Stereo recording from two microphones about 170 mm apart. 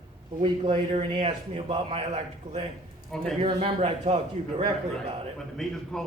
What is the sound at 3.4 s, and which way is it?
A man's voice, 35° right (ahead or behind).